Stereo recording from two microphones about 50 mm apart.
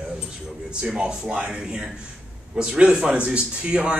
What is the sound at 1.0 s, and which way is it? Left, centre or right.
A man's voice, centre.